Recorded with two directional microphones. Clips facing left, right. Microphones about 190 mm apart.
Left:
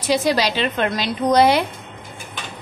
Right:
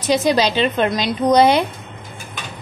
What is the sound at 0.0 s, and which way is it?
A woman's voice, 20° right (ahead or behind).